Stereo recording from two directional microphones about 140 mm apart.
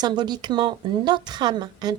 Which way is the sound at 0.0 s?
30° right (ahead or behind).